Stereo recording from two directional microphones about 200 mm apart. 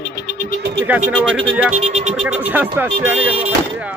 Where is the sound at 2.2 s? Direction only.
5° right (ahead or behind).